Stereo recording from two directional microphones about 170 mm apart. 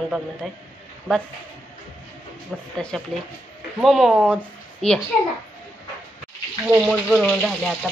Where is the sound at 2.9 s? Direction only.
5° left (ahead or behind).